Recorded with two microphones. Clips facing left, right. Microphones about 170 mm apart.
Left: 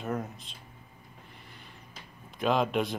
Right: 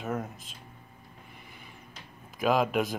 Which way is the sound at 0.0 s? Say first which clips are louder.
Even; centre (ahead or behind).